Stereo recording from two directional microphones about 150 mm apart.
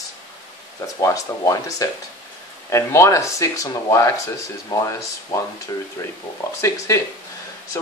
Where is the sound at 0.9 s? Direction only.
20° left (ahead or behind).